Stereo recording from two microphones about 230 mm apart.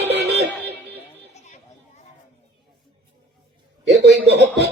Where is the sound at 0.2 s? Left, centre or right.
Centre.